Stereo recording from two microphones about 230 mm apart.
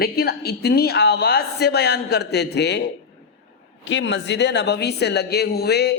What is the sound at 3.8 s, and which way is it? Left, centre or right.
A woman's voice, left.